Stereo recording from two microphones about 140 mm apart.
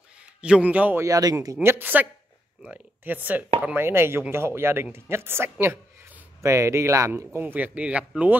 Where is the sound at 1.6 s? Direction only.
15° right (ahead or behind).